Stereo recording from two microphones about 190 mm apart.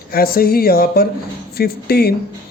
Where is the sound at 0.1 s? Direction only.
50° left (ahead or behind).